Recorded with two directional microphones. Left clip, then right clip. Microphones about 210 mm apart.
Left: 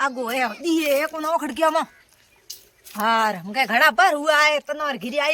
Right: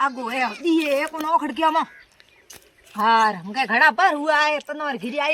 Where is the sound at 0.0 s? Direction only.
20° left (ahead or behind).